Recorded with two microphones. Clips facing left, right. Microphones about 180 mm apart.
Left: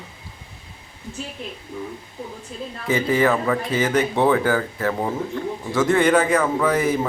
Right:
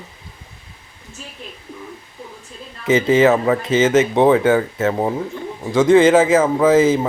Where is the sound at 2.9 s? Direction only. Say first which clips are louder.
Right 6 dB; 20° right (ahead or behind).